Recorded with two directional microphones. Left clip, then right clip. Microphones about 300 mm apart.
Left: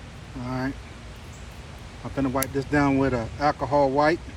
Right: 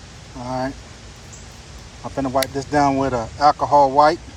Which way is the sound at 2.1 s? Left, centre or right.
Centre.